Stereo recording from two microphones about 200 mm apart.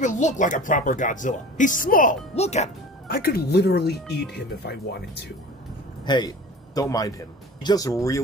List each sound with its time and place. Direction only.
0.0 s speech: 40° left (ahead or behind)
3.1 s speech: 50° left (ahead or behind)
6.0 s speech: 20° left (ahead or behind)